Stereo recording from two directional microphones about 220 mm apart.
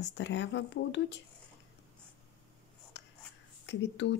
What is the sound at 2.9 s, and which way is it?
Writing, 55° left (ahead or behind).